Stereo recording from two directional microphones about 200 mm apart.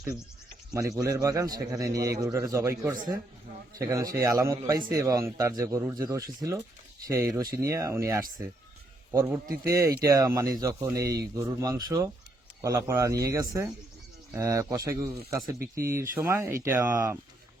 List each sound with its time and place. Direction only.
0.7 s a man's voice: 15° right (ahead or behind)
15.5 s speech: 50° right (ahead or behind)
15.9 s a man's voice: 15° right (ahead or behind)